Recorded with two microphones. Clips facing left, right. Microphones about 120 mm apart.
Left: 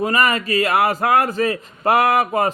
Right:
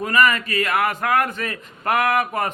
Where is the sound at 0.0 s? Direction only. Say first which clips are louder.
Even; 35° left (ahead or behind).